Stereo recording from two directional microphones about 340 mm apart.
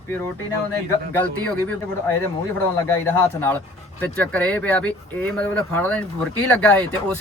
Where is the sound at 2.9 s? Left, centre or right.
Centre.